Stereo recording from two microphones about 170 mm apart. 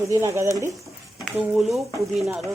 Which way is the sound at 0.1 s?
15° right (ahead or behind).